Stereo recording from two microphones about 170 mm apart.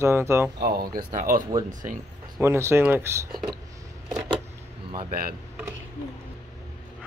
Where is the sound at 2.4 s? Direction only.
15° right (ahead or behind).